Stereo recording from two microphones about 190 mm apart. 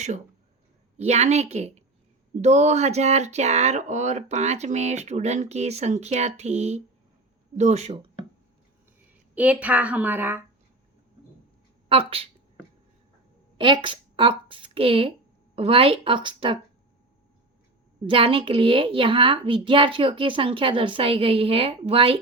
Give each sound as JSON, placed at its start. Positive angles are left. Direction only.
{"t": 0.9, "sound": "speech", "side_deg": -35}
{"t": 9.3, "sound": "a woman's voice", "side_deg": -5}
{"t": 11.9, "sound": "speech", "side_deg": -30}
{"t": 13.6, "sound": "a woman's voice", "side_deg": -25}
{"t": 18.0, "sound": "a woman's voice", "side_deg": -25}